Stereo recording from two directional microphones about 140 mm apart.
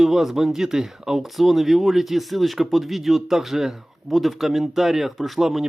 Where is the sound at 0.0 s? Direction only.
Centre (ahead or behind).